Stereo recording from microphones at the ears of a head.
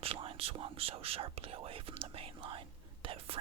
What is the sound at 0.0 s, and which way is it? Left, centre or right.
Speech, right.